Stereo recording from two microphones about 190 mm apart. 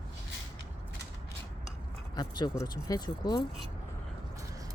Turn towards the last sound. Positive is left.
turn(degrees=20)  # may be behind; listen again after turning